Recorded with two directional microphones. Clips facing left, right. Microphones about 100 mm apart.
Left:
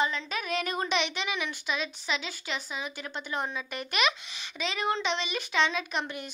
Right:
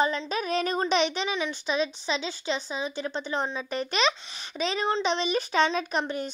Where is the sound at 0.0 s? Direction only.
35° right (ahead or behind).